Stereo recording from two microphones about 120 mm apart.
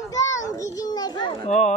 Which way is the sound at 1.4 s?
65° left (ahead or behind).